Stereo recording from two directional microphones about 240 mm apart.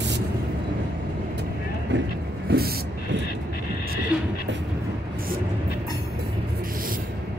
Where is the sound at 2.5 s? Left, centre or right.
Right.